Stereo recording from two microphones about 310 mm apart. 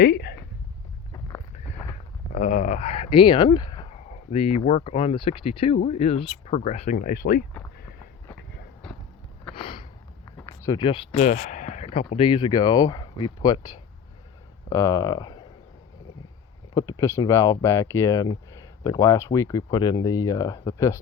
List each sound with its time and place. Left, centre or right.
0.0 s speech: left
2.3 s speech: left
9.6 s sniff: centre
10.3 s speech: centre
14.7 s speech: centre
16.7 s speech: centre